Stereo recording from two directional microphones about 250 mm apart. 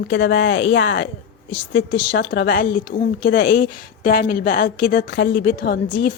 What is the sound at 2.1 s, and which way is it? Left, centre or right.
A woman's voice, left.